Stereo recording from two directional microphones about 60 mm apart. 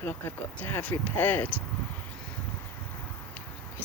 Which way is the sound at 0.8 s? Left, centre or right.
Left.